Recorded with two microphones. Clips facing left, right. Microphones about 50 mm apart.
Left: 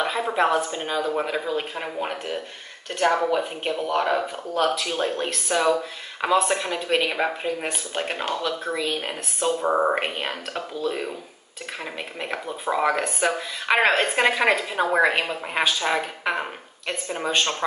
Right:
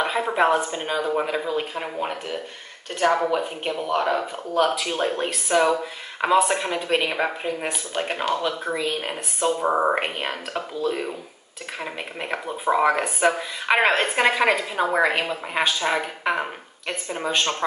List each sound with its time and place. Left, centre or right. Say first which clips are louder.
0.0 s speech: right 1 dB; centre
1.2 s speech: right 1 dB; centre
3.1 s speech: right 1 dB; centre
3.3 s speech: even; centre
4.7 s speech: right 1 dB; centre
7.1 s speech: even; centre